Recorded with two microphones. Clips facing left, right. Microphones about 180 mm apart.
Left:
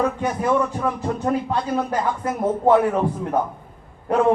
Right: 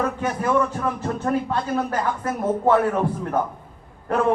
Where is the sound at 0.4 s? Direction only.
15° left (ahead or behind).